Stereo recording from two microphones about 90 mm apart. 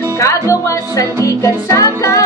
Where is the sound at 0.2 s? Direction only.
35° left (ahead or behind).